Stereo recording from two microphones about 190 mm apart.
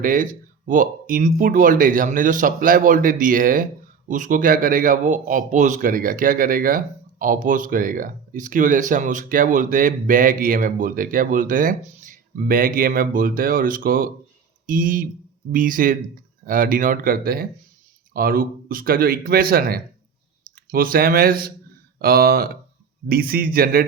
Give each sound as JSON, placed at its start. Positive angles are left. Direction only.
{"t": 0.0, "sound": "a man's voice", "side_deg": -45}